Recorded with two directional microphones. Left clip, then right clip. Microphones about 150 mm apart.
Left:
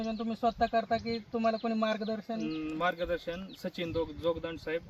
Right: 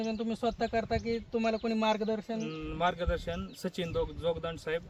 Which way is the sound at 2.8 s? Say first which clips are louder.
Right 1 dB; 25° right (ahead or behind).